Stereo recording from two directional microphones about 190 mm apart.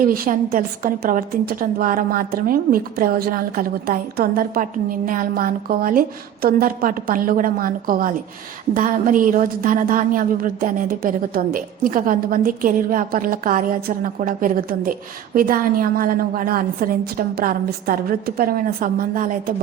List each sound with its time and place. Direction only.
0.0 s a woman's voice: 50° right (ahead or behind)